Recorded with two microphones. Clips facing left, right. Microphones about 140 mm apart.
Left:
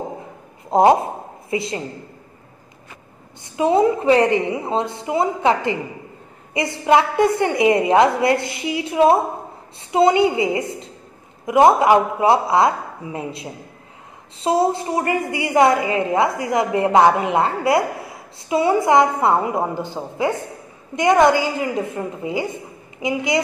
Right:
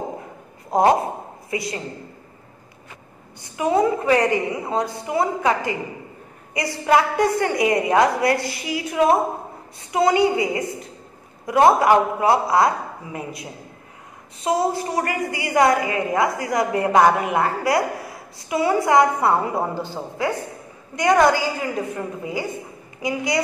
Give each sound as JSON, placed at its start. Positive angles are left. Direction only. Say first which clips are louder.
{"t": 0.7, "sound": "a woman's voice", "louder": "left 3 dB", "side_deg": 25}
{"t": 3.4, "sound": "a woman's voice", "louder": "left 3 dB", "side_deg": 25}